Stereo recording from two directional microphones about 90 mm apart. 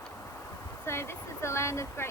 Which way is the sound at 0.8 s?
30° left (ahead or behind).